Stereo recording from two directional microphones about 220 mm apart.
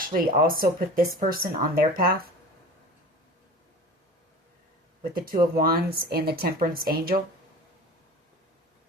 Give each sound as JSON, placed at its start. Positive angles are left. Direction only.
{"t": 0.1, "sound": "speech", "side_deg": -40}
{"t": 5.1, "sound": "speech", "side_deg": -40}